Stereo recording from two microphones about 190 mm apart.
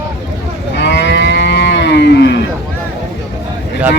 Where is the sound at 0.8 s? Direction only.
65° left (ahead or behind).